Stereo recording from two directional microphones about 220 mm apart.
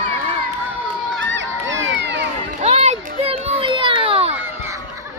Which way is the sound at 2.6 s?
30° right (ahead or behind).